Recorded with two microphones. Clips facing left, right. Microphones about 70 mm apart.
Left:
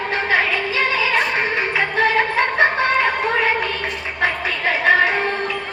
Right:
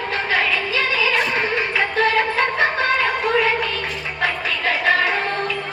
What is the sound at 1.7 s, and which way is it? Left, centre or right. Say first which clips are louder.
Music: left 1 dB; left.